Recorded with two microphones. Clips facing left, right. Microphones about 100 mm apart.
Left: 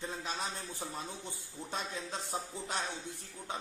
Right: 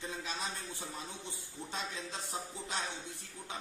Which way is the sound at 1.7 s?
45° left (ahead or behind).